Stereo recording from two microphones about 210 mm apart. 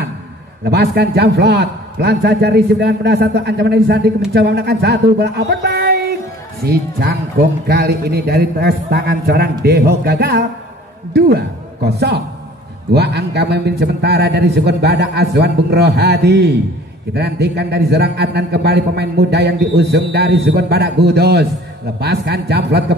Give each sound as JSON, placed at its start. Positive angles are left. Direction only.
{"t": 0.7, "sound": "a man's voice", "side_deg": -50}